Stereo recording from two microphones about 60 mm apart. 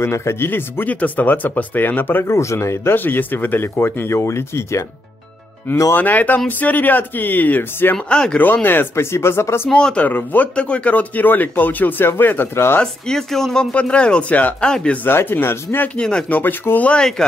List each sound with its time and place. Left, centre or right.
0.0 s speech: left
0.5 s speech: left
2.2 s speech: left
5.9 s speech: left
7.9 s speech: centre
8.6 s speech: left
9.7 s speech: centre
10.0 s speech: left
12.8 s speech: centre
13.7 s speech: centre
15.0 s speech: left
16.0 s speech: centre
16.3 s speech: left